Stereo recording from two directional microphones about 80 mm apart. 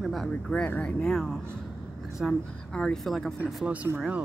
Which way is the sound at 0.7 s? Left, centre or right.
Centre.